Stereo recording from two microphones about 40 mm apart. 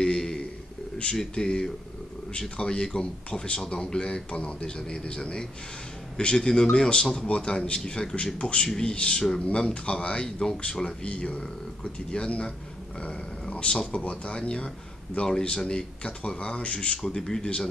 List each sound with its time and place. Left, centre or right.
0.0 s a sound: centre
1.3 s speech: centre
4.6 s speech: centre
15.7 s speech: left
17.0 s speech: centre
17.4 s speech: left